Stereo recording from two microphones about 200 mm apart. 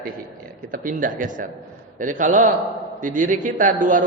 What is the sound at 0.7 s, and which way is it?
A man's voice, 45° right (ahead or behind).